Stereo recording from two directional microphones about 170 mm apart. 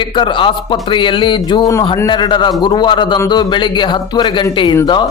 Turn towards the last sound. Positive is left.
turn(degrees=30)  # may be behind; listen again after turning